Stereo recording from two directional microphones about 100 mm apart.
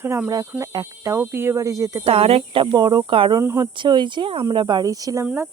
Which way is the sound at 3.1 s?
60° right (ahead or behind).